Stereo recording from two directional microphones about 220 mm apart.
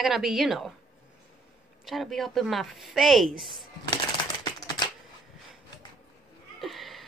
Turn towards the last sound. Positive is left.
turn(degrees=0)  # may be behind; listen again after turning